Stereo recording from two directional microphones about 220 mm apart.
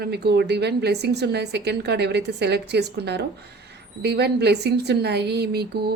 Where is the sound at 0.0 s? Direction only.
45° right (ahead or behind).